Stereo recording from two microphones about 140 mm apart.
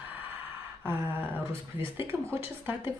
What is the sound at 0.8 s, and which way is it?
Speech, 15° right (ahead or behind).